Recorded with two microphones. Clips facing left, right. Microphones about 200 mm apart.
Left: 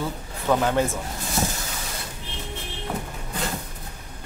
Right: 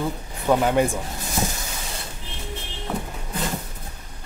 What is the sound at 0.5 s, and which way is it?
Speech, 15° right (ahead or behind).